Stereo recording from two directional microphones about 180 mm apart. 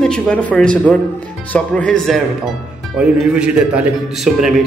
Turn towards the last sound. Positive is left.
turn(degrees=-5)  # may be behind; listen again after turning